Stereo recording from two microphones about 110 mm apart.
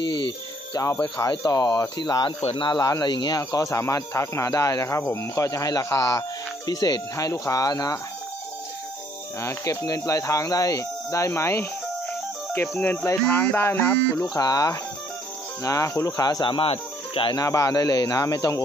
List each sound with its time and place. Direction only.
0.8 s speech: 35° left (ahead or behind)
2.8 s speech: 35° left (ahead or behind)
9.4 s speech: 25° left (ahead or behind)
12.8 s music: 15° left (ahead or behind)
14.3 s speech: 35° left (ahead or behind)
16.5 s speech: 60° left (ahead or behind)
17.4 s speech: 30° left (ahead or behind)